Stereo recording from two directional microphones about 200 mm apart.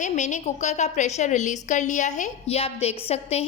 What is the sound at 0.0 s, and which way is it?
A woman's voice, 35° left (ahead or behind).